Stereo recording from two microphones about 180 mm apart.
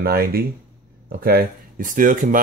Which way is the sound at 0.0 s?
55° right (ahead or behind).